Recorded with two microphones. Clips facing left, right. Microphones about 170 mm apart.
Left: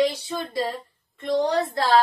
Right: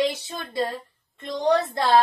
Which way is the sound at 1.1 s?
20° left (ahead or behind).